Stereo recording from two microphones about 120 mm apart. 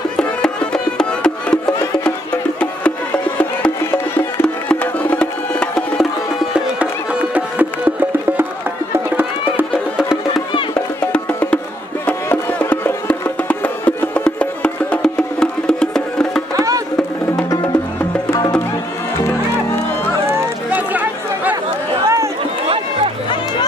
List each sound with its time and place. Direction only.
0.2 s music: 10° left (ahead or behind)
3.8 s music: 20° left (ahead or behind)
7.3 s music: 15° right (ahead or behind)
11.1 s music: 10° left (ahead or behind)
16.5 s music: 30° right (ahead or behind)
19.1 s music: 20° left (ahead or behind)
20.2 s a sound: 15° right (ahead or behind)
22.0 s run: 25° right (ahead or behind)